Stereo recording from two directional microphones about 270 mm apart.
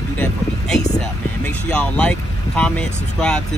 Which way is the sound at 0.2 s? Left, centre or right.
Centre.